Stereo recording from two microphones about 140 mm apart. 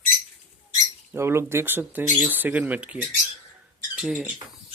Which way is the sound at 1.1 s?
20° right (ahead or behind).